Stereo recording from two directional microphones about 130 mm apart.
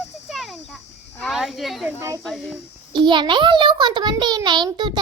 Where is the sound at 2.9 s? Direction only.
35° right (ahead or behind).